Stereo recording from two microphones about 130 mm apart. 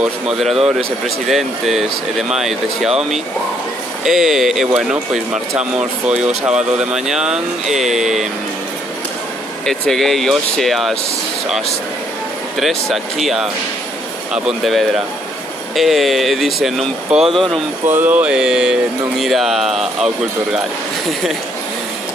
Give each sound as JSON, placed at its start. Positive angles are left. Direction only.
{"t": 0.0, "sound": "speech", "side_deg": -5}
{"t": 9.7, "sound": "speech", "side_deg": 5}
{"t": 12.5, "sound": "speech", "side_deg": 0}
{"t": 17.8, "sound": "speech", "side_deg": -15}